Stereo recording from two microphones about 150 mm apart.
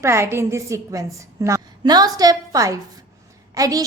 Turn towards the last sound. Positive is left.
turn(degrees=-25)  # may be behind; listen again after turning